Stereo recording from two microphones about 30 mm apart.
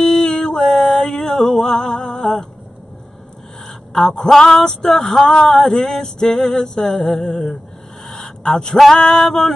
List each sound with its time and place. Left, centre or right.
0.2 s music: left
0.7 s a sound: centre
4.1 s male singing: centre
5.2 s music: left
8.1 s a sound: centre
8.9 s music: centre